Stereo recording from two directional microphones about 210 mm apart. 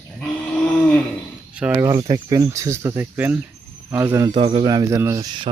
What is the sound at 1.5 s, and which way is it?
Speech, 10° right (ahead or behind).